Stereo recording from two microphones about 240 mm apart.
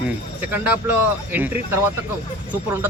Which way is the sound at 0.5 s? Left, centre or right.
Centre.